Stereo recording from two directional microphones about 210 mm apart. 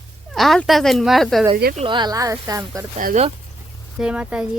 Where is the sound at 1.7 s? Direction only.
25° right (ahead or behind).